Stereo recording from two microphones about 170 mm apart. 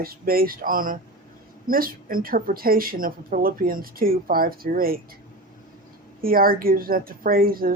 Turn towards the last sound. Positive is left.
turn(degrees=-60)  # may be behind; listen again after turning